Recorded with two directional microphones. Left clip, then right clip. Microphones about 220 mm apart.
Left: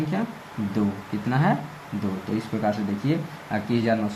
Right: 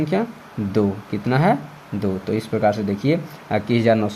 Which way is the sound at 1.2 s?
50° right (ahead or behind).